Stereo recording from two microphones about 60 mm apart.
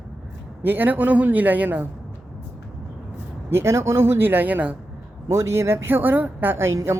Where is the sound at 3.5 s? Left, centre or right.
Right.